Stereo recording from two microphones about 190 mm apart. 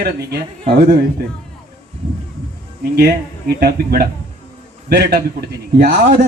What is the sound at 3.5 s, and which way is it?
Speech, 55° right (ahead or behind).